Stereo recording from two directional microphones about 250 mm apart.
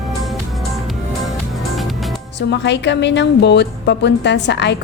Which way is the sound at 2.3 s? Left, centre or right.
Left.